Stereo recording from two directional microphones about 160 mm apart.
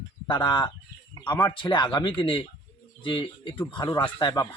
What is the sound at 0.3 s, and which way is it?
Speech, 30° left (ahead or behind).